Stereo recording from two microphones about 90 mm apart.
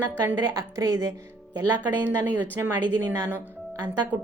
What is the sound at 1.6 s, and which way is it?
Speech, 20° right (ahead or behind).